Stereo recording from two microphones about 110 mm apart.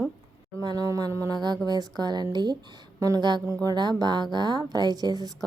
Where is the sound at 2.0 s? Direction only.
35° right (ahead or behind).